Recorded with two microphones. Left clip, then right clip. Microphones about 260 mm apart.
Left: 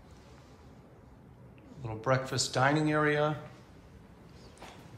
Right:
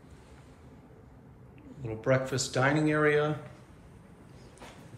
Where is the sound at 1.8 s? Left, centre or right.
Centre.